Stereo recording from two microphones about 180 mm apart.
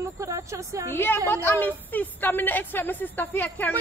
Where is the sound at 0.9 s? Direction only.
10° left (ahead or behind).